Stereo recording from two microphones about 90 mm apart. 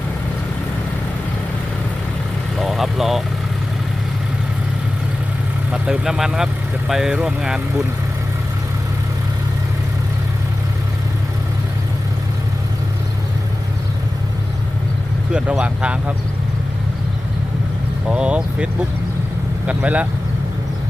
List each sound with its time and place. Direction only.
2.6 s vehicle: centre (ahead or behind)
5.7 s speech: 10° right (ahead or behind)
15.3 s speech: 10° right (ahead or behind)
18.1 s speech: 10° right (ahead or behind)